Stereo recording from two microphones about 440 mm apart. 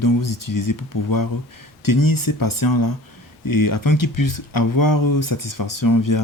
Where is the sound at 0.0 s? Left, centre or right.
Left.